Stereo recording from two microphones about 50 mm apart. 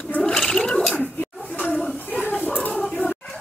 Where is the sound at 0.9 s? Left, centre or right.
Left.